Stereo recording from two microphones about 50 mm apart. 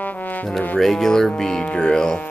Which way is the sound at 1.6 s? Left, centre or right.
Left.